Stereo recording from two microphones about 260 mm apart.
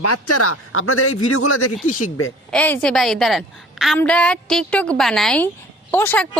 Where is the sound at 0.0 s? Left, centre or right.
Left.